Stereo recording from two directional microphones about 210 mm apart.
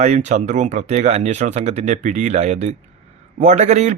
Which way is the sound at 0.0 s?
35° right (ahead or behind).